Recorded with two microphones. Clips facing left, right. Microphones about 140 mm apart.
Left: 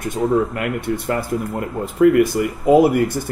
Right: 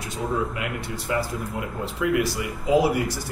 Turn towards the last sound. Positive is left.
turn(degrees=55)  # may be behind; listen again after turning